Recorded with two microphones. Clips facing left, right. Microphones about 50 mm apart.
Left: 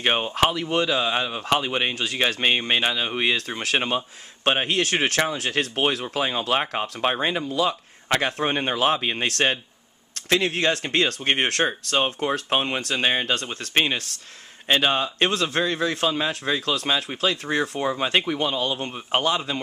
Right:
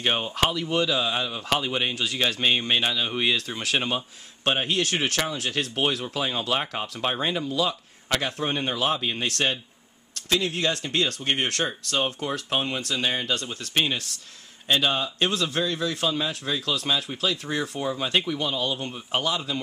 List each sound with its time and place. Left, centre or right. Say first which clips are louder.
0.0 s speech: left 3 dB; left
4.6 s speech: left 3 dB; left
5.8 s speech: left 1 dB; left
8.1 s speech: left 4 dB; left
10.4 s speech: left 4 dB; left